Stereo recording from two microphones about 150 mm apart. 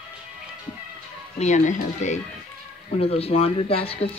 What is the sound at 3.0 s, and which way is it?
Speech, 40° left (ahead or behind).